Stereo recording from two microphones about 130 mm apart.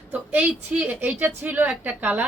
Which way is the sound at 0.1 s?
15° right (ahead or behind).